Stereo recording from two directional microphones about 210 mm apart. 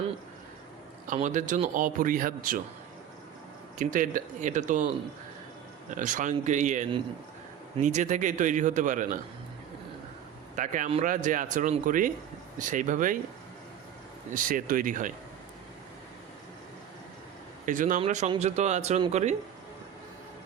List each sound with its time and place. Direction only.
1.0 s speech: 35° right (ahead or behind)
3.8 s speech: 40° right (ahead or behind)
5.9 s speech: 40° right (ahead or behind)
10.5 s speech: 35° right (ahead or behind)
14.3 s speech: 40° right (ahead or behind)
17.7 s speech: 40° right (ahead or behind)